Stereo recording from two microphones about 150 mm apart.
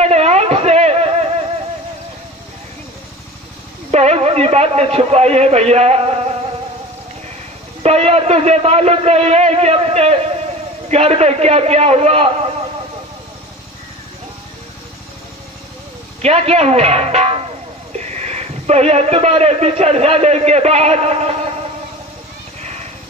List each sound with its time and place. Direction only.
0.0 s a sound: 45° right (ahead or behind)
3.9 s speech: 45° right (ahead or behind)
7.8 s a man's voice: 45° right (ahead or behind)
16.2 s a man's voice: 45° right (ahead or behind)
22.6 s vehicle: 50° right (ahead or behind)